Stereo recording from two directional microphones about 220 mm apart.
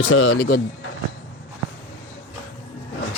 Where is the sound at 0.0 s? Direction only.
60° left (ahead or behind); by 0.6 s 45° left (ahead or behind).